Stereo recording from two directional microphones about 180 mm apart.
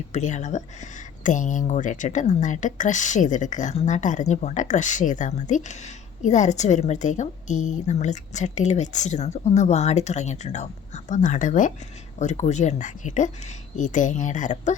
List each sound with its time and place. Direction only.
0.1 s a woman's voice: 40° left (ahead or behind)